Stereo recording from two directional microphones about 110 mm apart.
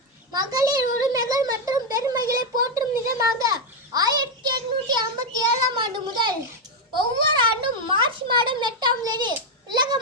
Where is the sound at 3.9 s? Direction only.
35° right (ahead or behind).